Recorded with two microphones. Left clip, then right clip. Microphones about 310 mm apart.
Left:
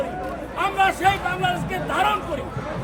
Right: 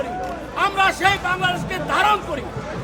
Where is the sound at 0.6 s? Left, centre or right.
Centre.